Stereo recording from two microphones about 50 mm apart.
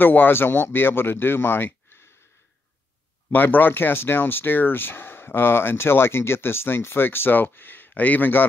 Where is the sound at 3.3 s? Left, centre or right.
Left.